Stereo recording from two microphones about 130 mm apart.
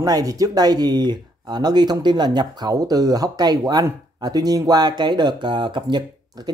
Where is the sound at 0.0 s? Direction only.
30° right (ahead or behind).